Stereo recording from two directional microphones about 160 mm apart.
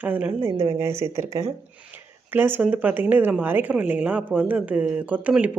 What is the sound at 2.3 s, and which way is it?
Speech, 10° right (ahead or behind).